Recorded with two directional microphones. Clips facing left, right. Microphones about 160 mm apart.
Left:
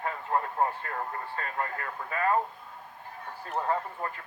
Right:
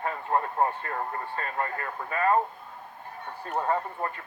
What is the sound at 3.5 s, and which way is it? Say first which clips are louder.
Speech: right 2 dB; 35° right (ahead or behind).